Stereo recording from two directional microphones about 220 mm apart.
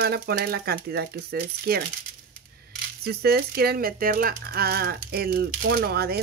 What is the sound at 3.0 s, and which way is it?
Speech, 45° right (ahead or behind).